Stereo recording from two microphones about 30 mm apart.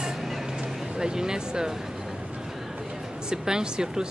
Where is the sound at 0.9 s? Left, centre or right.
Right.